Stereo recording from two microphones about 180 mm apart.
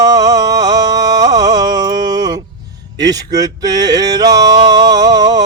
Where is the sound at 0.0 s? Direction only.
20° right (ahead or behind).